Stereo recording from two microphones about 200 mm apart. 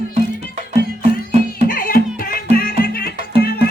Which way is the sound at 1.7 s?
45° left (ahead or behind).